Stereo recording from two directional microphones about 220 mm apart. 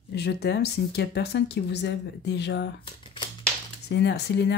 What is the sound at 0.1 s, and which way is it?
Speech, 50° left (ahead or behind).